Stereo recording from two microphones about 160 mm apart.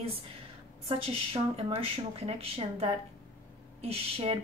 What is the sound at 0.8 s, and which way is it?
A woman's voice, 35° right (ahead or behind).